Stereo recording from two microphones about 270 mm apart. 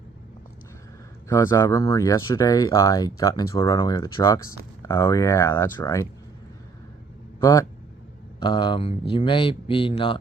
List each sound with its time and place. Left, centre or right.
1.3 s speech: centre
7.4 s speech: centre